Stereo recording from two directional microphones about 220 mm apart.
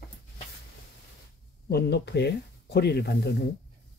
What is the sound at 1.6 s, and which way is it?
Speech, 50° left (ahead or behind).